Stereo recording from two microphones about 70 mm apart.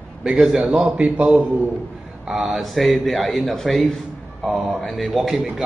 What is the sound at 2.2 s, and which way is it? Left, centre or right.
A man's voice, centre.